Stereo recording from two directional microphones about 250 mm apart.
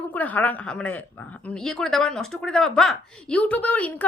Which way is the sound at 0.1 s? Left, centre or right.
Centre.